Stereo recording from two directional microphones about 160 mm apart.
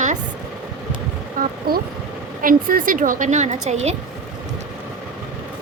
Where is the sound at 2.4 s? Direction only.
60° right (ahead or behind).